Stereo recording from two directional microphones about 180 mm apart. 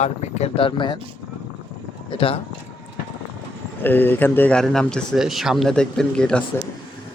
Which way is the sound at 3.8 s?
10° left (ahead or behind).